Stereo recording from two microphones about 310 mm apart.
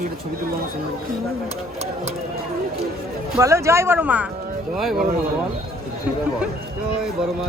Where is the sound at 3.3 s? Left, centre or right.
Centre.